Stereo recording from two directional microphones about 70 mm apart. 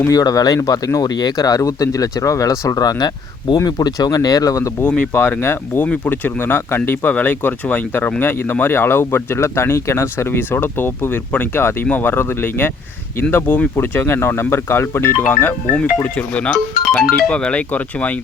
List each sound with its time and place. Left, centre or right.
0.1 s speech: left
4.8 s speech: centre
5.4 s speech: left